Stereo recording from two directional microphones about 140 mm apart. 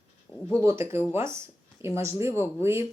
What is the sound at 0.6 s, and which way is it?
Speech, 20° right (ahead or behind).